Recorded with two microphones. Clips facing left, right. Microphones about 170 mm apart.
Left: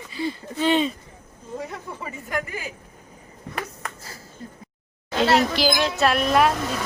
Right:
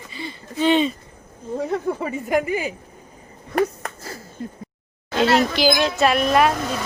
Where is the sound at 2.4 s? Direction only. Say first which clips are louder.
Right 10 dB; 70° right (ahead or behind).